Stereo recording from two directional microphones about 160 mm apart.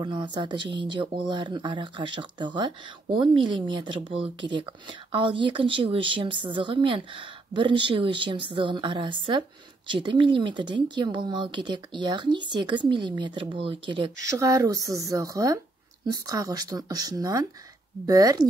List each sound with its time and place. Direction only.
0.0 s speech: 30° right (ahead or behind)
14.2 s speech: 20° right (ahead or behind)